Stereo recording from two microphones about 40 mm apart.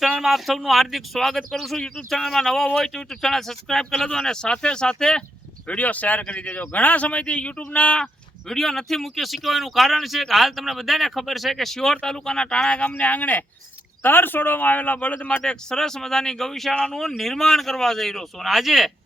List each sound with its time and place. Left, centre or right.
0.2 s speech: centre
1.7 s speech: centre
5.6 s speech: left
8.4 s speech: centre; by 12.9 s left
13.0 s speech: left
14.0 s speech: left
15.3 s speech: left
15.8 s speech: centre
18.5 s speech: centre